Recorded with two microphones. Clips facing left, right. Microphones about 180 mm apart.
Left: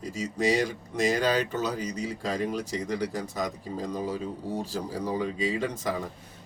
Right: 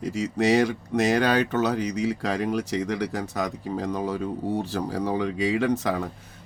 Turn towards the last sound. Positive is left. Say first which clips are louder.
# right 6 dB
turn(degrees=-70)  # may be behind; listen again after turning